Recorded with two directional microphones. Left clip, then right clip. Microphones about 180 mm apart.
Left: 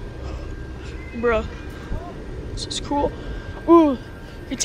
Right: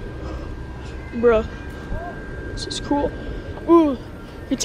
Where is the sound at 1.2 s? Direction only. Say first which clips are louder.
Right 4 dB; 15° right (ahead or behind).